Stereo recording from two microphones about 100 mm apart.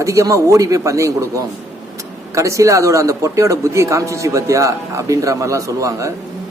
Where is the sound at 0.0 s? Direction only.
30° right (ahead or behind).